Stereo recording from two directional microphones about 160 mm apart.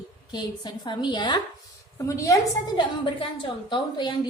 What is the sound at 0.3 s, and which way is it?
A woman's voice, 25° left (ahead or behind).